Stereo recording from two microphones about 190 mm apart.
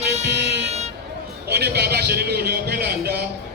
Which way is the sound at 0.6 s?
35° right (ahead or behind).